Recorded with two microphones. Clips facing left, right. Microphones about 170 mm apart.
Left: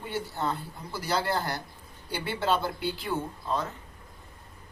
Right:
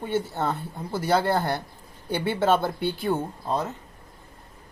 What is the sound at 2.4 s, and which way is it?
Speech, 50° right (ahead or behind).